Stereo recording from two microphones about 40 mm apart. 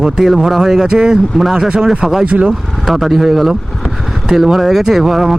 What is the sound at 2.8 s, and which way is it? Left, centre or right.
Speech, centre.